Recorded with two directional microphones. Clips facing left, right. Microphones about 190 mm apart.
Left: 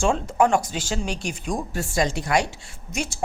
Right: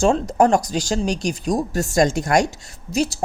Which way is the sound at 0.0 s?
40° right (ahead or behind).